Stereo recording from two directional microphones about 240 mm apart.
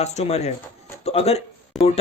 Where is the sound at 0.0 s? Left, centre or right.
Left.